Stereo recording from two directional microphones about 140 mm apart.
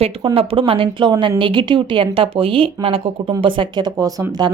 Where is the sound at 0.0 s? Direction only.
45° right (ahead or behind).